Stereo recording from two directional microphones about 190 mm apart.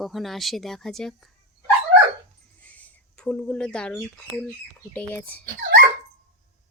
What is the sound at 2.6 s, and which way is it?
Speech, 5° left (ahead or behind).